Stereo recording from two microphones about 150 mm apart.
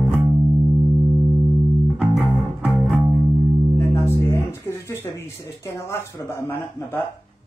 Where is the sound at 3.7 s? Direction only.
15° left (ahead or behind).